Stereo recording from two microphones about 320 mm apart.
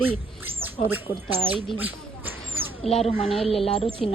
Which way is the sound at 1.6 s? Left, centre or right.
Centre.